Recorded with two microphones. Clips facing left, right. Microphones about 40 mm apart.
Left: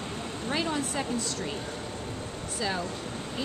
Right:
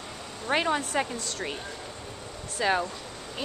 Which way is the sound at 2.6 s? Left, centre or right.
Right.